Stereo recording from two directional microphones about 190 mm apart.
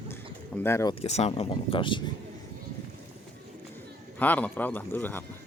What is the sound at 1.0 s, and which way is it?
Speech, 35° left (ahead or behind).